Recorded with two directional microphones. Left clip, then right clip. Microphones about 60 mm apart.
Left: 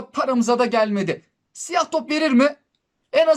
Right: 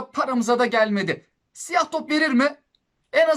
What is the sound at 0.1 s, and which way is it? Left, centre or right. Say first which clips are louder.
A woman's voice: left 2 dB; left.